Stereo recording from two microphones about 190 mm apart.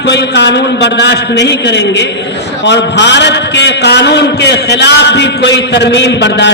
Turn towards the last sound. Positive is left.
turn(degrees=65)  # may be behind; listen again after turning